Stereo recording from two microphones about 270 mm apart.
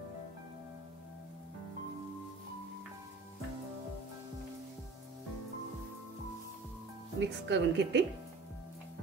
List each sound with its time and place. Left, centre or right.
7.2 s a woman's voice: right